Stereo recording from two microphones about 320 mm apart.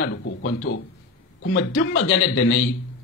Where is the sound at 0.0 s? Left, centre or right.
Left.